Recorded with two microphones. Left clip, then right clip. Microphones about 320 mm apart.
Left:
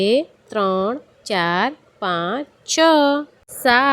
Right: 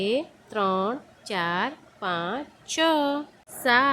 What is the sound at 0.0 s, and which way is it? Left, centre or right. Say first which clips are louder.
A woman's voice: left 9 dB; centre.